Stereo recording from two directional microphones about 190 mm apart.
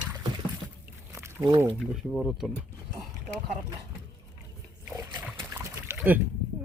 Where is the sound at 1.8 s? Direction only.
5° right (ahead or behind).